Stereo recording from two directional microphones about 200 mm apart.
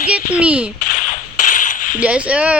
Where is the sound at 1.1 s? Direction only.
40° left (ahead or behind).